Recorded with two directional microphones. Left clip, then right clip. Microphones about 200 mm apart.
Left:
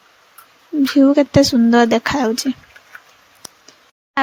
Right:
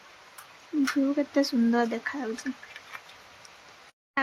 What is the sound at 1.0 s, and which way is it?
Speech, 45° left (ahead or behind).